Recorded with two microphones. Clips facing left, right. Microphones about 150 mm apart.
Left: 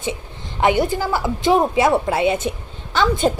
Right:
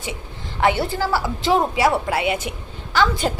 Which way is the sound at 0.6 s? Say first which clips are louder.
Left 2 dB; 20° left (ahead or behind).